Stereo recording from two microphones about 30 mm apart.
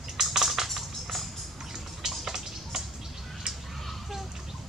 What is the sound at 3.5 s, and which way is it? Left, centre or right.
Fowl, right.